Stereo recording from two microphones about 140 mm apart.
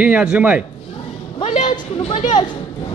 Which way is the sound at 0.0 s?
10° right (ahead or behind).